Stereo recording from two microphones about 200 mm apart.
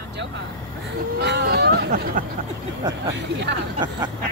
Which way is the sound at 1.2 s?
55° right (ahead or behind).